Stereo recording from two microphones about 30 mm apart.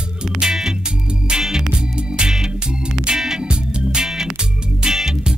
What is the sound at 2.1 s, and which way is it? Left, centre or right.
Organ, centre.